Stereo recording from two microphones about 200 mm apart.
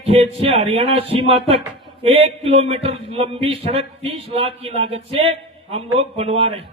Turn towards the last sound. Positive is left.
turn(degrees=-30)  # may be behind; listen again after turning